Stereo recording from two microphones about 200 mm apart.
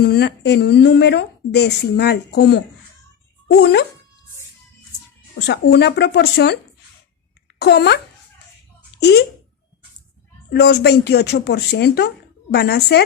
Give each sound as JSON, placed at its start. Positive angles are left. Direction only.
{"t": 0.0, "sound": "a woman's voice", "side_deg": 55}
{"t": 5.4, "sound": "a woman's voice", "side_deg": 60}
{"t": 7.6, "sound": "a woman's voice", "side_deg": 55}
{"t": 10.5, "sound": "a woman's voice", "side_deg": 55}